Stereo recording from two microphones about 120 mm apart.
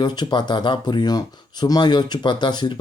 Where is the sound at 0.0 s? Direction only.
40° left (ahead or behind).